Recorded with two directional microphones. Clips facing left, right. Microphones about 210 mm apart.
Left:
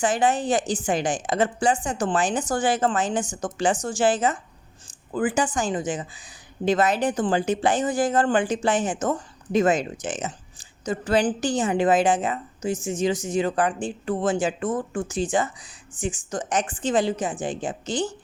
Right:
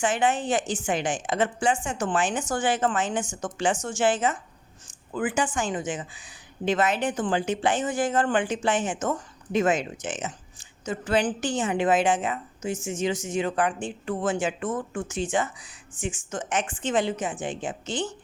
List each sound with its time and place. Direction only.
0.0 s speech: 35° left (ahead or behind)